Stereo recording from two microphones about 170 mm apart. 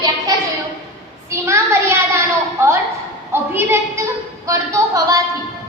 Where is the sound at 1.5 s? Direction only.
15° right (ahead or behind).